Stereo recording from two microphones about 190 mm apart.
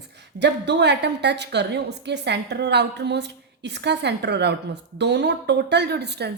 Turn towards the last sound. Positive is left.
turn(degrees=-60)  # may be behind; listen again after turning